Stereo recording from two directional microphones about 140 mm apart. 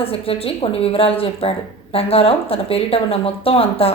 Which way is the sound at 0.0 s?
45° left (ahead or behind).